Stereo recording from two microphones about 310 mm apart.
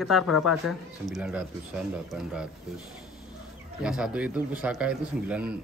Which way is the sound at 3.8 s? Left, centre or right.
Centre.